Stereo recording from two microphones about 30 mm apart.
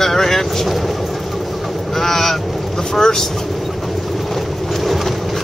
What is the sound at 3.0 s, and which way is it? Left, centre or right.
Speech, left.